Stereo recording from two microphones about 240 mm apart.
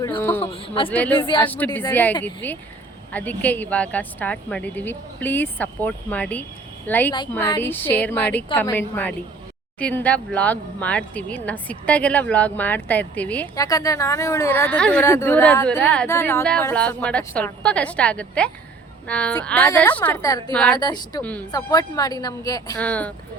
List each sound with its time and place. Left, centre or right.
0.0 s speech: centre
0.5 s a man's voice: left
0.9 s speech: centre
20.7 s speech: centre
21.2 s speech: centre